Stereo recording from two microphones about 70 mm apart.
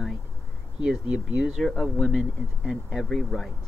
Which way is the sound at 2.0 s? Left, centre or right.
Centre.